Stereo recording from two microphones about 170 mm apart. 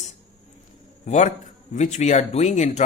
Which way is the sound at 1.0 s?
45° left (ahead or behind).